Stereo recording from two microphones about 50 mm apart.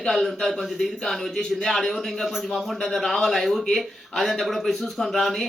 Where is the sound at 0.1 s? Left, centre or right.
Centre.